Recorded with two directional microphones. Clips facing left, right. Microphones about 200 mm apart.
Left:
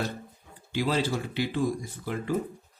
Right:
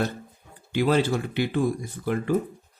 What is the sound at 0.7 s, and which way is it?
Speech, 60° right (ahead or behind).